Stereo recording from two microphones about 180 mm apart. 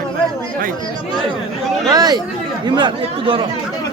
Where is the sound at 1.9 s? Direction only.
20° right (ahead or behind).